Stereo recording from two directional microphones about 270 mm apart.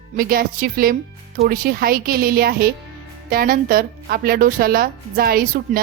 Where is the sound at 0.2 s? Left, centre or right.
Right.